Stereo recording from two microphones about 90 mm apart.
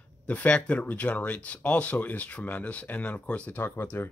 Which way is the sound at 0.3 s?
15° left (ahead or behind).